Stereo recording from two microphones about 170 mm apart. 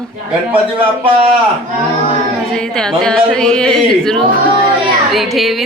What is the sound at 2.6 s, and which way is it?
A woman's voice, 5° left (ahead or behind).